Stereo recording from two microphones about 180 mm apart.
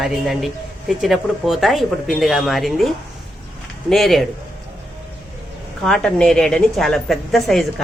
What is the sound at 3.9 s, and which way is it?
Speech, centre (ahead or behind).